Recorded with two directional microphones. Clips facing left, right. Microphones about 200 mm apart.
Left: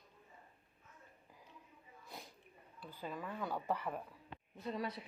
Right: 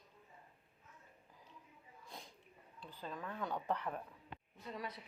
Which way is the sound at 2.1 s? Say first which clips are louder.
Left 1 dB; 5° left (ahead or behind).